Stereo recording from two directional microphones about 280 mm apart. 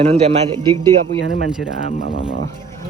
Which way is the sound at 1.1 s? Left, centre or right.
Right.